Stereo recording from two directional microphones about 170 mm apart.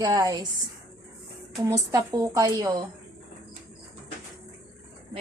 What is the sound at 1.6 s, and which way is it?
A woman's voice, 20° right (ahead or behind).